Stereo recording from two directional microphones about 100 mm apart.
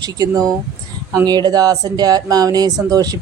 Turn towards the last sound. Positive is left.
turn(degrees=-40)  # may be behind; listen again after turning